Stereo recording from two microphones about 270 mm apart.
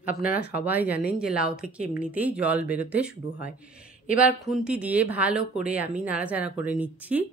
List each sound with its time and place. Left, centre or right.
0.0 s speech: left
0.4 s speech: centre
4.2 s speech: centre